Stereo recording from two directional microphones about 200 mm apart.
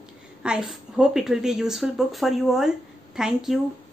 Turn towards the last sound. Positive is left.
turn(degrees=0)  # may be behind; listen again after turning